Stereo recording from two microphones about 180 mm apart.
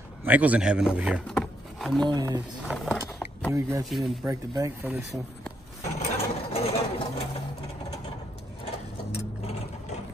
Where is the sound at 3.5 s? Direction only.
15° right (ahead or behind).